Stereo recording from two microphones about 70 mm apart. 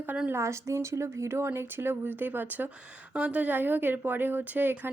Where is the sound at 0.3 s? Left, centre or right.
Right.